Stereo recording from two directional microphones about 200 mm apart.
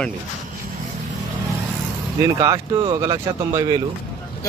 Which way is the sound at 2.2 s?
20° right (ahead or behind).